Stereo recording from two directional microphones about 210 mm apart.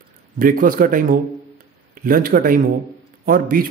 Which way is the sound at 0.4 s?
40° right (ahead or behind).